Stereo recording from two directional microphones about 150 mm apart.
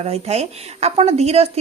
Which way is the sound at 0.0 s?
45° right (ahead or behind).